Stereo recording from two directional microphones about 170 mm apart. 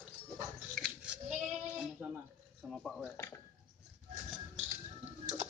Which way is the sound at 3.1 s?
15° left (ahead or behind).